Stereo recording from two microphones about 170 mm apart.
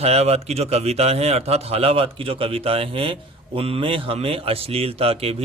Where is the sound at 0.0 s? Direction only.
40° right (ahead or behind).